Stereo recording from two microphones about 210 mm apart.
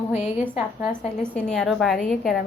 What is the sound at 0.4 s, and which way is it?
A woman's voice, 5° right (ahead or behind).